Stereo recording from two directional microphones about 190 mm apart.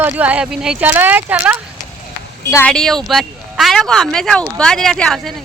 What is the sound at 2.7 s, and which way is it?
Speech, centre (ahead or behind).